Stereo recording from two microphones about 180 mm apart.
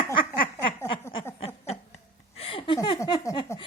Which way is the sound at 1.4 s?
35° left (ahead or behind).